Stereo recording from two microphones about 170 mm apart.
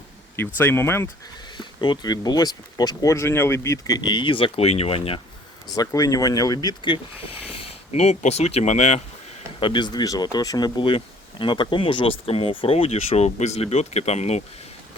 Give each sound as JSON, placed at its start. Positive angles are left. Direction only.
{"t": 0.3, "sound": "speech", "side_deg": 10}
{"t": 1.5, "sound": "speech", "side_deg": 25}
{"t": 5.7, "sound": "speech", "side_deg": 20}
{"t": 9.6, "sound": "speech", "side_deg": 30}